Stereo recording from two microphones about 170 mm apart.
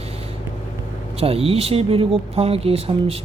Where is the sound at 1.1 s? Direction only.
35° right (ahead or behind).